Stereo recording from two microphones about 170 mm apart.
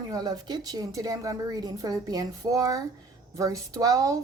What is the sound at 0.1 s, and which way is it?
A woman's voice, 25° right (ahead or behind).